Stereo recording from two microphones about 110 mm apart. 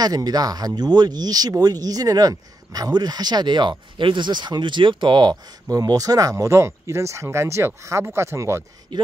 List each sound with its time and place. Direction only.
0.0 s speech: 35° right (ahead or behind)